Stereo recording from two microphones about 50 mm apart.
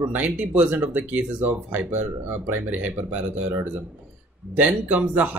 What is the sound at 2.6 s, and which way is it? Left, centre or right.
Speech, right.